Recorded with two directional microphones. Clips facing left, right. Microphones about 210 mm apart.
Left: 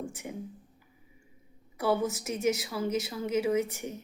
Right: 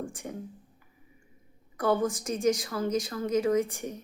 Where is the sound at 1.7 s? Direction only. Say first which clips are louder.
Right 2 dB; 5° left (ahead or behind).